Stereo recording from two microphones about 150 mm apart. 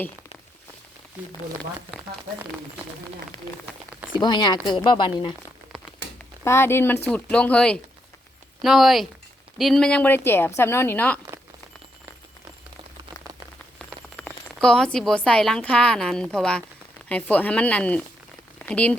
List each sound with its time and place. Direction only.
4.2 s speech: 30° left (ahead or behind)
6.1 s a woman's voice: 15° left (ahead or behind)
14.2 s a sound: 10° left (ahead or behind)
14.9 s a woman's voice: 5° left (ahead or behind)